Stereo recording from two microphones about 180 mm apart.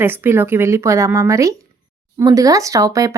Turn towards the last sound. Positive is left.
turn(degrees=-20)  # may be behind; listen again after turning